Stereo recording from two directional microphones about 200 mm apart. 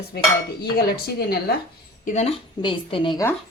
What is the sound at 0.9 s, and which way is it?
Speech, 50° left (ahead or behind).